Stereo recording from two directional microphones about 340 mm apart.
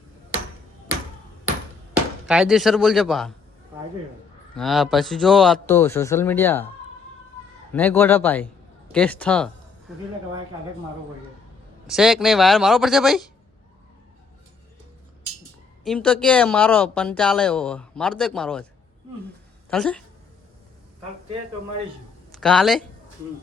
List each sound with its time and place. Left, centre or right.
2.2 s speech: centre
4.5 s speech: centre
7.7 s speech: centre
11.9 s speech: centre
15.8 s speech: centre
19.7 s speech: centre
22.3 s speech: centre